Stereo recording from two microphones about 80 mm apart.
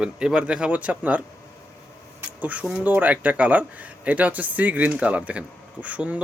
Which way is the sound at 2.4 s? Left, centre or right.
Centre.